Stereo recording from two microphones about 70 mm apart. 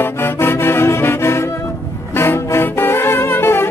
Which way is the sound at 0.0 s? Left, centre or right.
Left.